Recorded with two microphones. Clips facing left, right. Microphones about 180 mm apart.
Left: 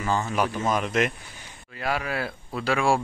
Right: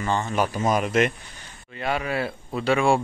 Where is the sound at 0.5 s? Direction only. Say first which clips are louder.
Right 3 dB; 10° right (ahead or behind).